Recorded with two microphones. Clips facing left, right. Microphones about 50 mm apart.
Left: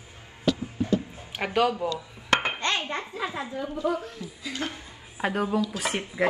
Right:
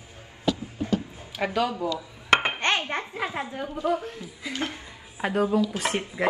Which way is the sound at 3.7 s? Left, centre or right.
Right.